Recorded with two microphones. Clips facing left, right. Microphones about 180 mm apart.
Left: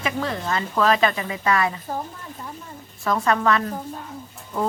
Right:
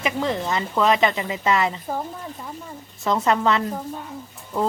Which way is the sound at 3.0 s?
25° right (ahead or behind).